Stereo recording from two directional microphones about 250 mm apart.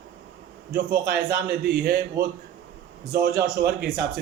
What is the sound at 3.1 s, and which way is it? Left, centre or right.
Speech, right.